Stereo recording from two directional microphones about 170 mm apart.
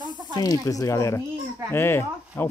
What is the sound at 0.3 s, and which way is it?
Speech, 20° left (ahead or behind).